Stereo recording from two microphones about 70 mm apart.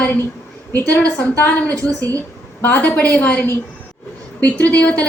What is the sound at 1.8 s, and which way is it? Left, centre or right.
Speech, right.